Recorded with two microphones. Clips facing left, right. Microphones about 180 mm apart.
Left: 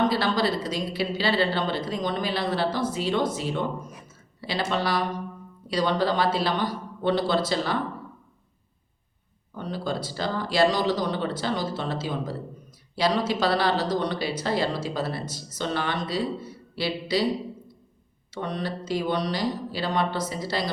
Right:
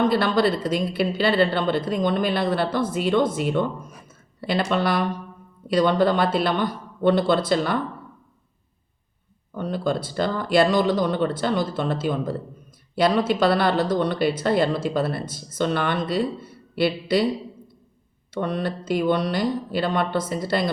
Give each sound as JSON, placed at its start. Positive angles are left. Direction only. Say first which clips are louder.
{"t": 0.1, "sound": "speech", "louder": "right 4 dB", "side_deg": -55}
{"t": 9.6, "sound": "speech", "louder": "right 5 dB", "side_deg": -55}
{"t": 18.3, "sound": "speech", "louder": "right 5 dB", "side_deg": -55}